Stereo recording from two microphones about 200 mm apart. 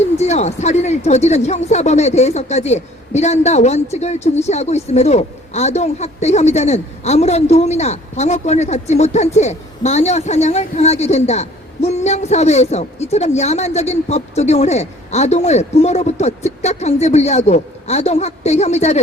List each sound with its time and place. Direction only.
0.2 s speech: 35° left (ahead or behind)